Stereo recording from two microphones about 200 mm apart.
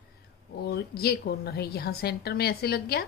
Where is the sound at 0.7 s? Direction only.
55° left (ahead or behind).